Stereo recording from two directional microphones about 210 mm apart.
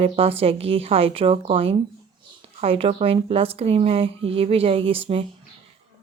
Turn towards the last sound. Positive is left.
turn(degrees=-25)  # may be behind; listen again after turning